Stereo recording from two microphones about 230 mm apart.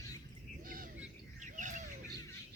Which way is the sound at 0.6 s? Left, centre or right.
Right.